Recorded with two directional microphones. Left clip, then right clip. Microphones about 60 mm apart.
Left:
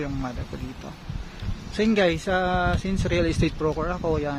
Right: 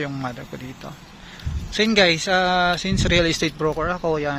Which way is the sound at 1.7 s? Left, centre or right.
Right.